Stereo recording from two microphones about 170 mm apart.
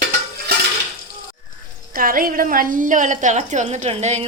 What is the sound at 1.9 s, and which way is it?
A woman's voice, 55° right (ahead or behind).